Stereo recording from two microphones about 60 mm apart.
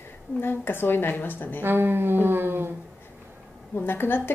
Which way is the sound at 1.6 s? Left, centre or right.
Right.